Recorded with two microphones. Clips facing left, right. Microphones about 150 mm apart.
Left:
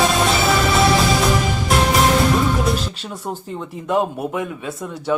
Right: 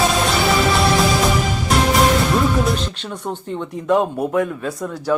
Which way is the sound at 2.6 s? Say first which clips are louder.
Right 1 dB; centre (ahead or behind).